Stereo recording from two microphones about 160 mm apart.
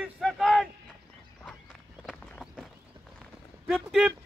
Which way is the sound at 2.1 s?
Centre (ahead or behind).